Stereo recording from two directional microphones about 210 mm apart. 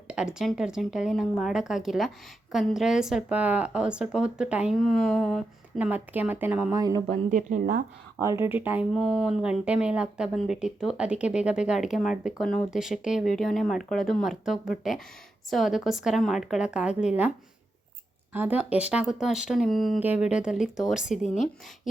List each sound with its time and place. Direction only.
0.1 s speech: 5° right (ahead or behind)
7.1 s a woman's voice: 35° right (ahead or behind)
8.2 s speech: 15° right (ahead or behind)
18.3 s speech: 5° right (ahead or behind)
21.2 s a woman's voice: 35° left (ahead or behind)